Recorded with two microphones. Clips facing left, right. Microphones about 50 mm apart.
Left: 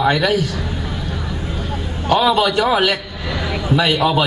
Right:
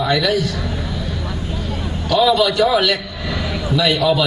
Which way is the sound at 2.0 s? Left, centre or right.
Left.